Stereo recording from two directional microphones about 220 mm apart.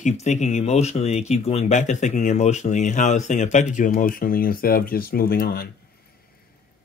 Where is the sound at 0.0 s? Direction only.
30° left (ahead or behind).